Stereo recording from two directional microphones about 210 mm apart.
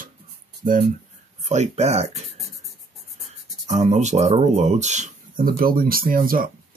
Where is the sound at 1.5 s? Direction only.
30° right (ahead or behind).